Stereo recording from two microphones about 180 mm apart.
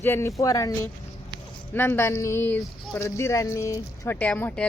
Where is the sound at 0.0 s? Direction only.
15° left (ahead or behind).